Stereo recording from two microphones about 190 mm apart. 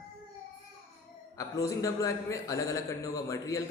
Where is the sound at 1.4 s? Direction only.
15° left (ahead or behind).